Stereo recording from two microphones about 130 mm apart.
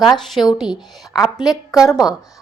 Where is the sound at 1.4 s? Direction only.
30° left (ahead or behind).